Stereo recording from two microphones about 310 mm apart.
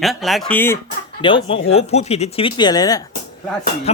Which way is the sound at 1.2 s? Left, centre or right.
Centre.